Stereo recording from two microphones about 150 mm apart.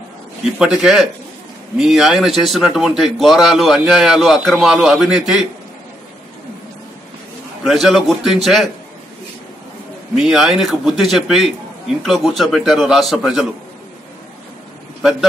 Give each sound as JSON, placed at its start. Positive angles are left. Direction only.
{"t": 0.6, "sound": "speech", "side_deg": -5}
{"t": 7.6, "sound": "speech", "side_deg": 0}
{"t": 10.1, "sound": "speech", "side_deg": 0}
{"t": 15.0, "sound": "a man's voice", "side_deg": 0}